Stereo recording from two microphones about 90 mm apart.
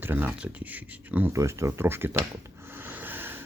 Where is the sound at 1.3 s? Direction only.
35° right (ahead or behind).